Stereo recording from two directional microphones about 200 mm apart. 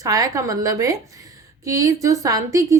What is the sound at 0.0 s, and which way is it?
A woman's voice, 15° right (ahead or behind).